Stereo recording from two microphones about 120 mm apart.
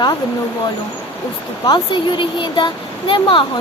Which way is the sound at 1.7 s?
40° left (ahead or behind).